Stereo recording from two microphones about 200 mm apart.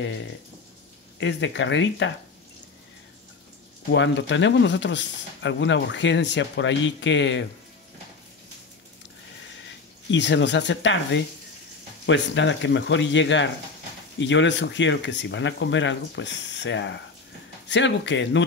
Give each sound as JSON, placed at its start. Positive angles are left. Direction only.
{"t": 1.2, "sound": "speech", "side_deg": 65}
{"t": 3.9, "sound": "speech", "side_deg": 65}
{"t": 10.1, "sound": "speech", "side_deg": 60}
{"t": 12.1, "sound": "speech", "side_deg": 65}